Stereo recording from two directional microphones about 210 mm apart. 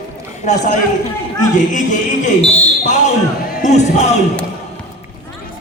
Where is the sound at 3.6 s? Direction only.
35° left (ahead or behind).